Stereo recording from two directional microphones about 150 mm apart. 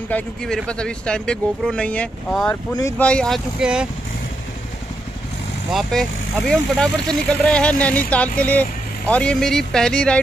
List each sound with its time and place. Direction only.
0.1 s speech: 5° left (ahead or behind)
2.5 s speech: 20° left (ahead or behind)
3.0 s speech: 5° left (ahead or behind)
5.7 s speech: centre (ahead or behind)